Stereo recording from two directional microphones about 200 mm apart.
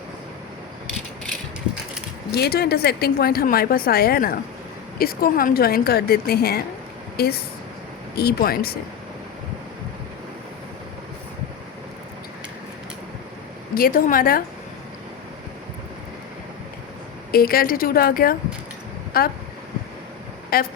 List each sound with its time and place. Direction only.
2.3 s a woman's voice: 50° left (ahead or behind)
13.7 s a woman's voice: 45° left (ahead or behind)
17.3 s a woman's voice: 45° left (ahead or behind)
20.5 s speech: 50° left (ahead or behind)